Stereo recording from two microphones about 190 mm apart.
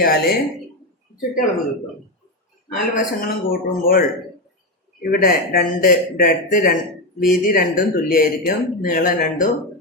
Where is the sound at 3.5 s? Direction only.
50° left (ahead or behind).